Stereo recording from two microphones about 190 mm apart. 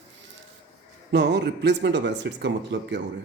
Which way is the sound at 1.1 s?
60° right (ahead or behind).